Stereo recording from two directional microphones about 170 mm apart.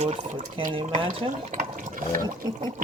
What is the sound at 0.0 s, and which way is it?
Speech, 40° right (ahead or behind).